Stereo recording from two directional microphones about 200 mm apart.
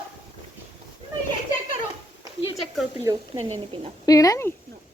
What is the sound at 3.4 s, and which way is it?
Speech, 30° right (ahead or behind).